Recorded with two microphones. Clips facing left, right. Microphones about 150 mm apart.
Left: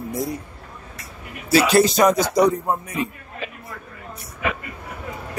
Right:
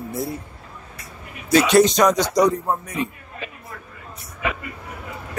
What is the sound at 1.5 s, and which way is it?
Speech, 5° left (ahead or behind).